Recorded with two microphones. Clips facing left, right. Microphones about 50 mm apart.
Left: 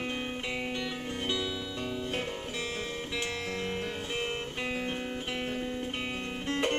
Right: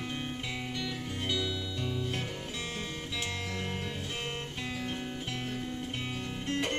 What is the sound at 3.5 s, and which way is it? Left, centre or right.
Music, left.